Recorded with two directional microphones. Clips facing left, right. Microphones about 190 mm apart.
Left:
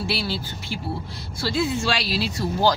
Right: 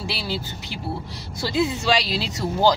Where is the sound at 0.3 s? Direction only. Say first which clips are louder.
Even; 15° right (ahead or behind).